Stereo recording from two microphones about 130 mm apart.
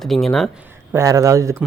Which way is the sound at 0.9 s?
25° right (ahead or behind).